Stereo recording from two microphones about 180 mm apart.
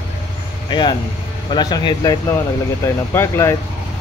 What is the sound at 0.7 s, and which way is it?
Speech, 25° left (ahead or behind).